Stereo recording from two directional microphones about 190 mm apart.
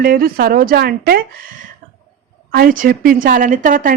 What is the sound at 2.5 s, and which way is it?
Speech, 50° right (ahead or behind).